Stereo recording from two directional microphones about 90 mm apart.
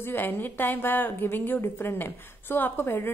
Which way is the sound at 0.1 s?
20° left (ahead or behind).